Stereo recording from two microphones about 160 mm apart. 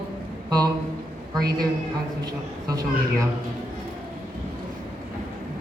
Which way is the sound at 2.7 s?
20° right (ahead or behind).